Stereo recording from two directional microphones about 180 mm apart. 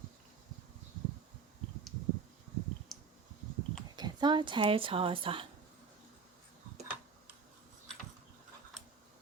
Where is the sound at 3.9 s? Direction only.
25° right (ahead or behind).